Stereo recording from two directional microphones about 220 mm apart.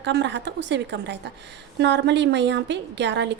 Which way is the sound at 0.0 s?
50° right (ahead or behind).